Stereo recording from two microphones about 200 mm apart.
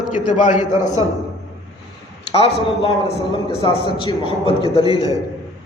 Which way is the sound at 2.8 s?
30° left (ahead or behind).